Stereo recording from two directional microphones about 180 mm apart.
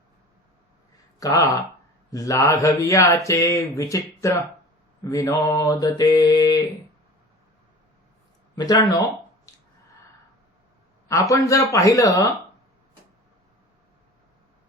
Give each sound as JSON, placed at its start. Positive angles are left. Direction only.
{"t": 1.2, "sound": "mantra", "side_deg": 20}
{"t": 3.2, "sound": "speech", "side_deg": 15}
{"t": 5.0, "sound": "mantra", "side_deg": 15}
{"t": 8.5, "sound": "mantra", "side_deg": 20}
{"t": 9.5, "sound": "a sound", "side_deg": 20}
{"t": 11.1, "sound": "mantra", "side_deg": 20}